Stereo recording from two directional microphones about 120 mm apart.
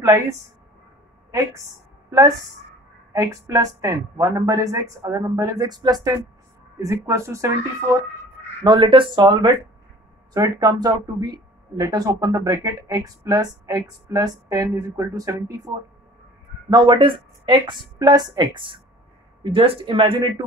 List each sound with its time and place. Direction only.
0.0 s a woman's voice: 20° right (ahead or behind)
2.0 s a woman's voice: 25° right (ahead or behind)
6.8 s a woman's voice: 25° right (ahead or behind)
8.6 s a woman's voice: 40° right (ahead or behind); by 15.8 s 25° right (ahead or behind)
16.7 s speech: 40° right (ahead or behind)